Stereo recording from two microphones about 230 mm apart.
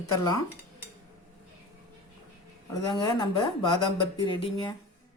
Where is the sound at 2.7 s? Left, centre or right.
Centre.